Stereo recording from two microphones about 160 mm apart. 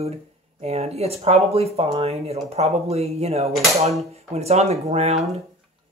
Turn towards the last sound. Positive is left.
turn(degrees=-45)  # may be behind; listen again after turning